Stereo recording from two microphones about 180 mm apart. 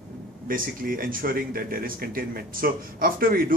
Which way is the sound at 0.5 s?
50° right (ahead or behind).